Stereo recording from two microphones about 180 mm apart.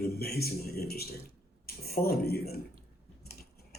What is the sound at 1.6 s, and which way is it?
Speech, 60° left (ahead or behind).